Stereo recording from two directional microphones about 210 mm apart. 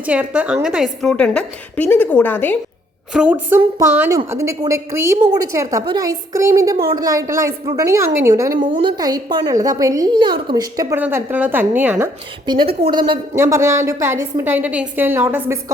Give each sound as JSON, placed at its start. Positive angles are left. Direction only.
{"t": 0.0, "sound": "a woman's voice", "side_deg": -5}
{"t": 3.1, "sound": "a woman's voice", "side_deg": -5}
{"t": 6.7, "sound": "speech", "side_deg": -45}
{"t": 7.0, "sound": "a woman's voice", "side_deg": -15}